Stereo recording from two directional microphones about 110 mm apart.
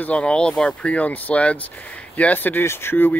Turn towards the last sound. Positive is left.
turn(degrees=20)  # may be behind; listen again after turning